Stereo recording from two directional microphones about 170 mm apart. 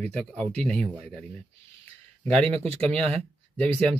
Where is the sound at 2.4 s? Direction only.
35° right (ahead or behind).